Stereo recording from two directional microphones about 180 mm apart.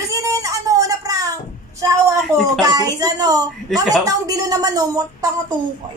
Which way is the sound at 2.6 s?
20° right (ahead or behind).